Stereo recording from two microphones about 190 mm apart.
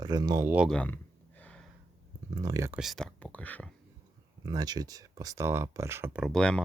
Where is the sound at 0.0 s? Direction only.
20° right (ahead or behind).